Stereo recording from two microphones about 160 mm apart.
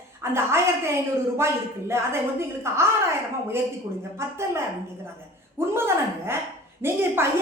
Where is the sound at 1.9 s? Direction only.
15° right (ahead or behind).